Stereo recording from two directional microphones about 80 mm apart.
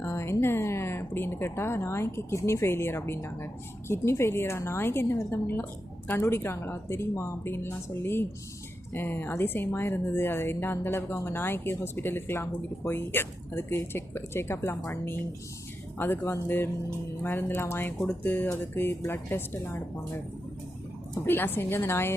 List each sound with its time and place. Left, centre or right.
0.0 s speech: left
18.0 s speech: centre
21.2 s speech: left